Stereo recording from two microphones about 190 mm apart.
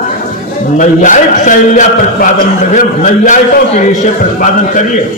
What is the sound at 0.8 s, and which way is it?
A man's voice, 40° left (ahead or behind).